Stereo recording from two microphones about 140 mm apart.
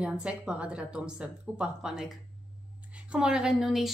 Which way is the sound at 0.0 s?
5° right (ahead or behind).